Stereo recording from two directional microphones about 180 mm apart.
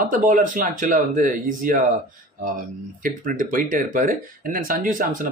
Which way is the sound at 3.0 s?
50° right (ahead or behind).